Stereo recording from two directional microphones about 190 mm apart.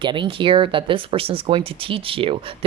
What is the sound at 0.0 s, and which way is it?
Speech, 25° right (ahead or behind).